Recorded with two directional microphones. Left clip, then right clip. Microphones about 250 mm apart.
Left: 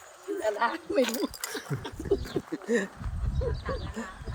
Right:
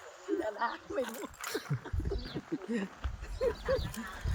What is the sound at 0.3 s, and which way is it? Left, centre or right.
Speech, left.